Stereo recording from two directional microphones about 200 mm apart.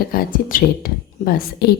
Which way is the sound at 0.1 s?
45° left (ahead or behind).